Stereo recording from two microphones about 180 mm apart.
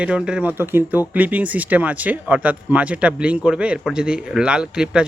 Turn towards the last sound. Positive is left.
turn(degrees=-5)  # may be behind; listen again after turning